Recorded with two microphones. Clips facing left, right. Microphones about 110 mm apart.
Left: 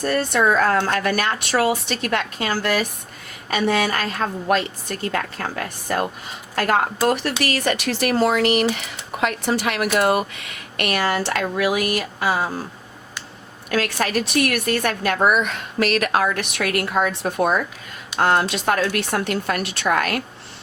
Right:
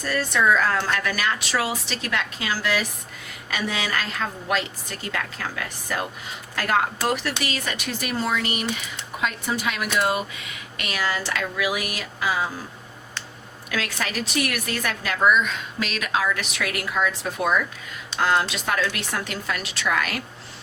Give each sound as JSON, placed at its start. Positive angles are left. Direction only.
{"t": 0.0, "sound": "a woman's voice", "side_deg": 50}
{"t": 11.3, "sound": "a woman's voice", "side_deg": 40}
{"t": 12.3, "sound": "speech", "side_deg": 35}
{"t": 13.7, "sound": "speech", "side_deg": 50}
{"t": 16.8, "sound": "speech", "side_deg": 40}
{"t": 17.1, "sound": "a woman's voice", "side_deg": 55}